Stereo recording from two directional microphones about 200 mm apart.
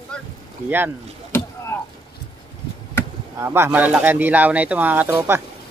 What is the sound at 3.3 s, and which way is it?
A man's voice, 10° right (ahead or behind).